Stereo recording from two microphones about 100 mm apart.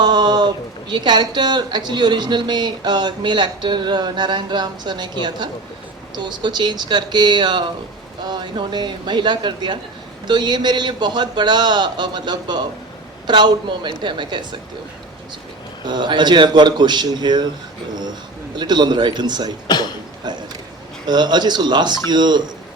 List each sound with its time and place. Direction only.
0.0 s speech: 45° right (ahead or behind)
15.8 s speech: 50° right (ahead or behind)
18.5 s speech: 50° right (ahead or behind)
19.6 s speech: 45° left (ahead or behind)
20.2 s a sound: 45° right (ahead or behind)
21.1 s speech: 45° right (ahead or behind)